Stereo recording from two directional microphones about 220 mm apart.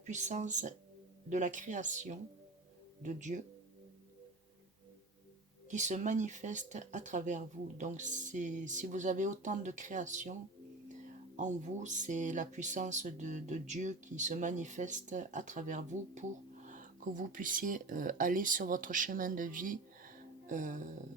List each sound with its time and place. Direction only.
0.0 s speech: 35° right (ahead or behind)
5.6 s speech: 35° right (ahead or behind)
11.3 s speech: 35° right (ahead or behind)